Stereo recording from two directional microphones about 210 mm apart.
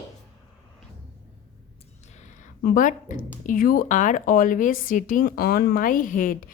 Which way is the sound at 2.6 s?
40° left (ahead or behind).